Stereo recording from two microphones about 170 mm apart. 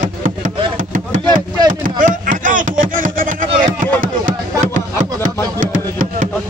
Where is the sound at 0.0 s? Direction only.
50° right (ahead or behind).